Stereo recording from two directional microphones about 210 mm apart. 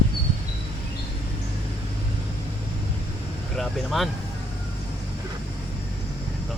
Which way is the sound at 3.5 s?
Centre (ahead or behind).